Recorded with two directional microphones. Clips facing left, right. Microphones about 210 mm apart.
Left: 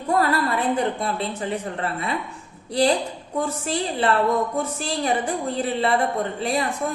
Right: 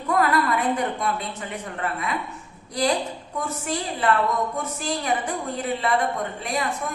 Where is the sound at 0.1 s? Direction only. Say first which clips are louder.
Even; 30° left (ahead or behind).